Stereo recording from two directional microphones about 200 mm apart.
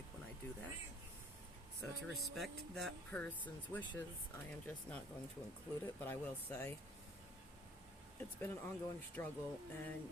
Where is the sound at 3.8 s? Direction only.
20° left (ahead or behind).